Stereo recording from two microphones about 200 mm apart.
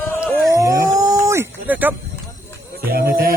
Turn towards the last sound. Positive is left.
turn(degrees=-50)  # may be behind; listen again after turning